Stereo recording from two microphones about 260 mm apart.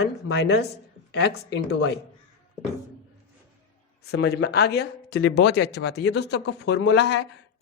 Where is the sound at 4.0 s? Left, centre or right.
Left.